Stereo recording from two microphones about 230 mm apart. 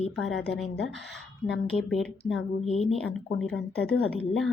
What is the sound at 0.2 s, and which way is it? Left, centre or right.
Speech, centre.